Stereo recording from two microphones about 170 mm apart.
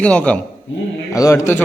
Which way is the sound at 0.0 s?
5° left (ahead or behind).